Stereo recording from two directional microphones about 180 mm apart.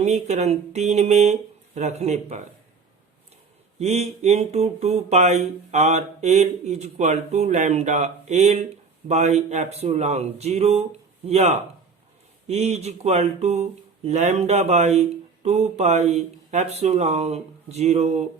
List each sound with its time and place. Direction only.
0.0 s speech: 40° right (ahead or behind)
3.8 s speech: 35° right (ahead or behind)